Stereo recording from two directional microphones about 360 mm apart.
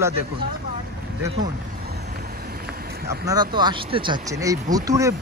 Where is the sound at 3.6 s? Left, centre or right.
Centre.